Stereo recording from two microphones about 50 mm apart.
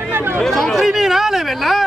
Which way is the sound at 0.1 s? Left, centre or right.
Right.